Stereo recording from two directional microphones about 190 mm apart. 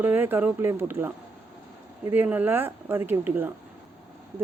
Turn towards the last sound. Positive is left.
turn(degrees=-10)  # may be behind; listen again after turning